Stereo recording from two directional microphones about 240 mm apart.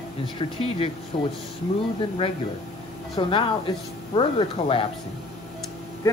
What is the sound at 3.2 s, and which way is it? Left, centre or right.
Speech, left.